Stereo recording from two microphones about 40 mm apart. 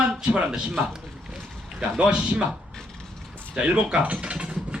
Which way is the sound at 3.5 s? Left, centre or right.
Right.